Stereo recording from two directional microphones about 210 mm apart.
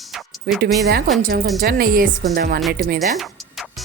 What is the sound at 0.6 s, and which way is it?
Speech, 50° right (ahead or behind).